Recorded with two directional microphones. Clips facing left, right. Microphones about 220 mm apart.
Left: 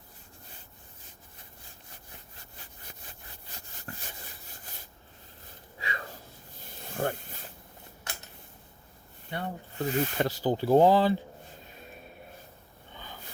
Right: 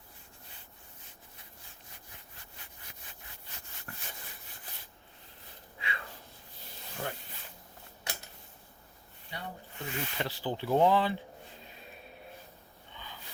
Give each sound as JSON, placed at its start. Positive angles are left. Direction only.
{"t": 3.9, "sound": "rub", "side_deg": 30}
{"t": 5.8, "sound": "a sound", "side_deg": 40}
{"t": 6.8, "sound": "snake", "side_deg": 50}
{"t": 9.3, "sound": "speech", "side_deg": 45}
{"t": 12.9, "sound": "snort", "side_deg": 45}